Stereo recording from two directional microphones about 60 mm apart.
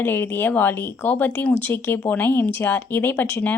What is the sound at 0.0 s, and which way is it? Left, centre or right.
Speech, left.